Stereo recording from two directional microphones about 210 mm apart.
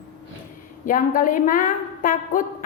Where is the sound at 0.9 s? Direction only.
40° left (ahead or behind).